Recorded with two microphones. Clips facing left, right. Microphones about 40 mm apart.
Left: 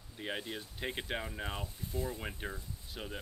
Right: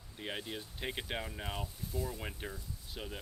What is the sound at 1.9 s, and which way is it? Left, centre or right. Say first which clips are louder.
Speech: left 1 dB; left.